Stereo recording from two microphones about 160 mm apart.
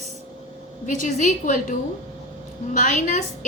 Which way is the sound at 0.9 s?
50° left (ahead or behind).